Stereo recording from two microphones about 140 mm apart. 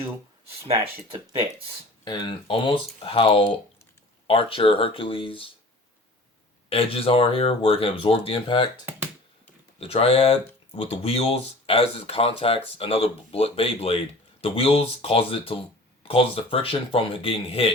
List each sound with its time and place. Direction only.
2.0 s speech: 35° left (ahead or behind)
6.7 s speech: 40° left (ahead or behind)
9.7 s speech: 45° left (ahead or behind)